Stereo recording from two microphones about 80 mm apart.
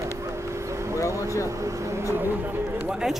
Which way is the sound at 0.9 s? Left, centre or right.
Left.